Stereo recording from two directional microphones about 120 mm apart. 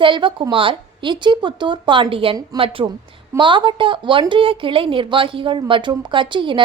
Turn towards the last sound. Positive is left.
turn(degrees=-45)  # may be behind; listen again after turning